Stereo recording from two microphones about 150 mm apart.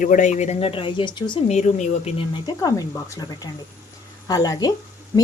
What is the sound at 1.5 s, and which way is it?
Speech, 50° left (ahead or behind).